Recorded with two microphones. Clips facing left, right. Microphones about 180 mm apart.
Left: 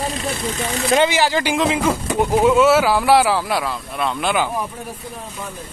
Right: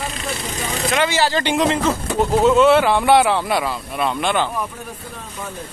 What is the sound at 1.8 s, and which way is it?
Speech, 10° left (ahead or behind).